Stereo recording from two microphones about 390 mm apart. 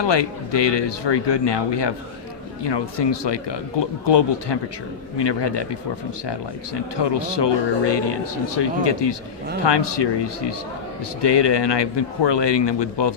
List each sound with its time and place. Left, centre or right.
0.0 s speech: left
6.9 s speech: left